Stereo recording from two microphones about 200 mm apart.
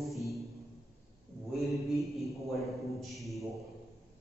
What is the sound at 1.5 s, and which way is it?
Mantra, centre (ahead or behind).